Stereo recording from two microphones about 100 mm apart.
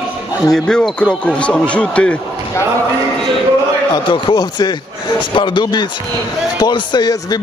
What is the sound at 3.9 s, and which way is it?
Speech, 50° left (ahead or behind).